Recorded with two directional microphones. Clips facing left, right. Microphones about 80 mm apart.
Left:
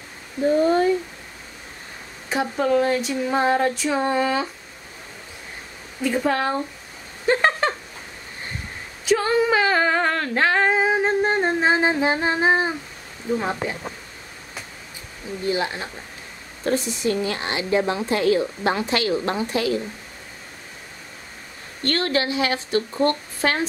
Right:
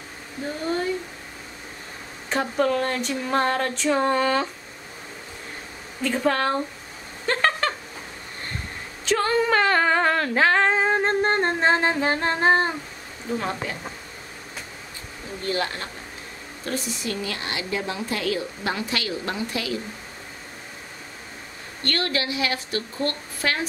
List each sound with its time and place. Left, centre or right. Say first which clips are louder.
2.2 s speech: left 1 dB; centre
6.0 s speech: left 1 dB; centre
7.2 s a sound: left 3 dB; centre
9.0 s female singing: left 2 dB; centre
13.4 s a woman's voice: left 3 dB; centre
15.4 s speech: left 3 dB; centre
16.6 s a woman's voice: left 7 dB; left
21.9 s a woman's voice: left 4 dB; left